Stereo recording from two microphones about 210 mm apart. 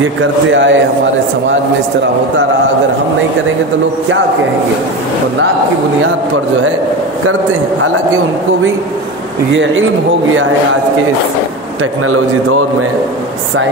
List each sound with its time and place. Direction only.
0.5 s a man's voice: 60° right (ahead or behind)
11.8 s a man's voice: 85° right